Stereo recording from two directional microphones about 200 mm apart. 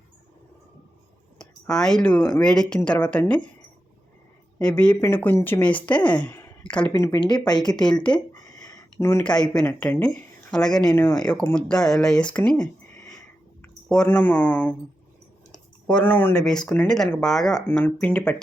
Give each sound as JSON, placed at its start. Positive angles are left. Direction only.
{"t": 1.4, "sound": "speech", "side_deg": 5}
{"t": 4.6, "sound": "speech", "side_deg": 5}
{"t": 8.6, "sound": "a sound", "side_deg": 15}
{"t": 9.6, "sound": "speech", "side_deg": 10}
{"t": 13.8, "sound": "speech", "side_deg": 5}